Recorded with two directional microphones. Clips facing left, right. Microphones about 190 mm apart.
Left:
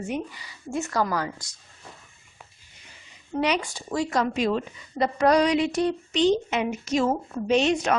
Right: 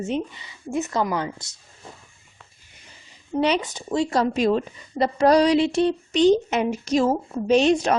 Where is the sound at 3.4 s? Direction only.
25° right (ahead or behind).